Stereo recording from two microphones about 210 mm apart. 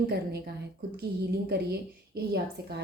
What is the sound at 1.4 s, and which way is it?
A woman's voice, 50° right (ahead or behind).